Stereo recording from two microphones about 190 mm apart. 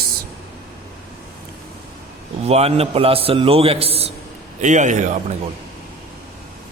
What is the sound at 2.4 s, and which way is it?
A man's voice, 35° right (ahead or behind).